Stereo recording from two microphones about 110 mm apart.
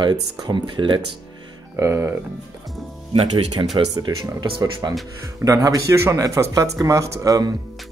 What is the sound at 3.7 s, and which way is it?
Speech, 35° right (ahead or behind).